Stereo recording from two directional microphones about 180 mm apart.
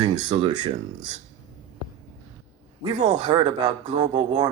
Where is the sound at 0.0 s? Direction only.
25° right (ahead or behind).